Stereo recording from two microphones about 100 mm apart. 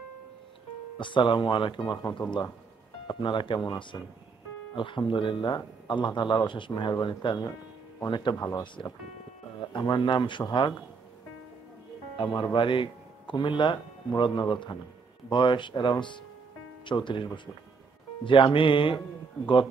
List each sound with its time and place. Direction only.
0.9 s speech: 55° left (ahead or behind)
3.1 s speech: 55° left (ahead or behind)
8.4 s speech: 35° left (ahead or behind)
9.6 s speech: 50° left (ahead or behind)
12.2 s speech: 50° left (ahead or behind)